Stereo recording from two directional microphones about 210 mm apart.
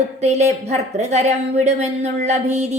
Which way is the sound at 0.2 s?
30° right (ahead or behind).